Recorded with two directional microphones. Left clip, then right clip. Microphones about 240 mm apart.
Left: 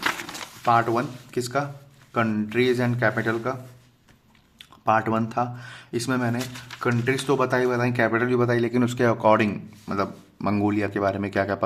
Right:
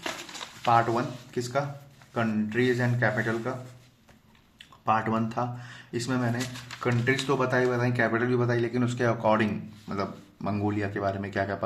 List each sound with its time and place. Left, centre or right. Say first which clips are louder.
0.6 s speech: left 3 dB; left
4.5 s speech: left 4 dB; left